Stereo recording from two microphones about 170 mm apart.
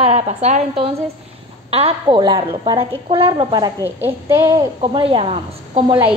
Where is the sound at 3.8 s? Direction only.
15° right (ahead or behind); by 5.9 s 35° right (ahead or behind).